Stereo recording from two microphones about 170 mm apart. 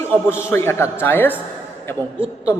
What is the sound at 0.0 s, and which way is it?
A man's voice, 15° left (ahead or behind).